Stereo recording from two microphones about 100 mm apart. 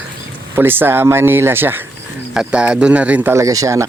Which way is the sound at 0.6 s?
20° right (ahead or behind).